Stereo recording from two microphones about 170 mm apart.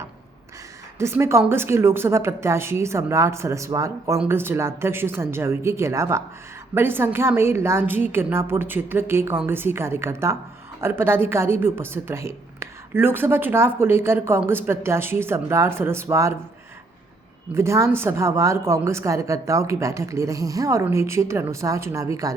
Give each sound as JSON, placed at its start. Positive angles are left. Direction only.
{"t": 0.9, "sound": "a woman's voice", "side_deg": -15}
{"t": 17.5, "sound": "a woman's voice", "side_deg": -15}